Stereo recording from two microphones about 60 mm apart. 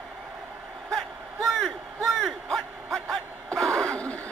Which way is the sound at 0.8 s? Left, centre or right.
Centre.